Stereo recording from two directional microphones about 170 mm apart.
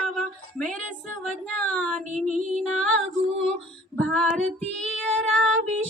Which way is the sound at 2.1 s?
45° right (ahead or behind).